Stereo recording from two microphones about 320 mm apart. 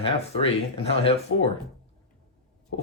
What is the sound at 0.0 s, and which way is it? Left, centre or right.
Speech, centre.